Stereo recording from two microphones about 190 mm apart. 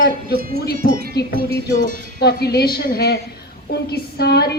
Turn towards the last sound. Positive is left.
turn(degrees=55)  # may be behind; listen again after turning